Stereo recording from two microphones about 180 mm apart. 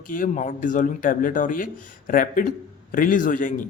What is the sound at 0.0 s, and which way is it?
A man's voice, 50° left (ahead or behind).